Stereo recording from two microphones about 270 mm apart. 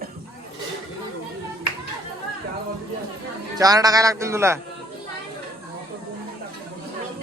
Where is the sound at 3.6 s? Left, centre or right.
Centre.